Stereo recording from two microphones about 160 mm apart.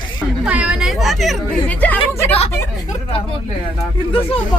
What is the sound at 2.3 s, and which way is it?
Speech, 40° left (ahead or behind).